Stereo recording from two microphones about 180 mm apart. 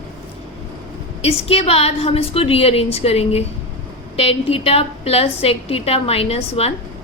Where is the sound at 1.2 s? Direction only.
35° left (ahead or behind).